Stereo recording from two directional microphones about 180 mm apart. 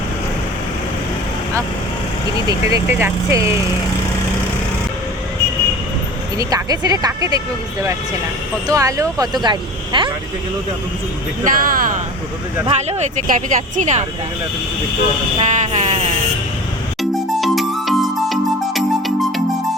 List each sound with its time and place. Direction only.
2.5 s speech: 20° right (ahead or behind)
6.3 s speech: 20° right (ahead or behind)
11.4 s speech: 50° right (ahead or behind)
12.6 s speech: 35° right (ahead or behind)
15.4 s a sound: 40° right (ahead or behind)
17.0 s music: centre (ahead or behind)